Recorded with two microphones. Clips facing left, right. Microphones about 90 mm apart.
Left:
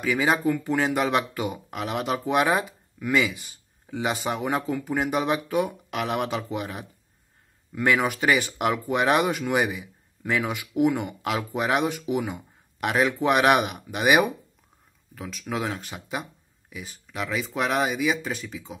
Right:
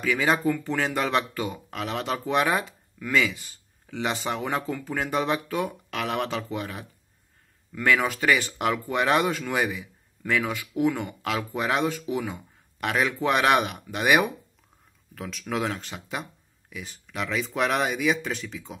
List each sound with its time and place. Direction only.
0.0 s speech: 15° left (ahead or behind)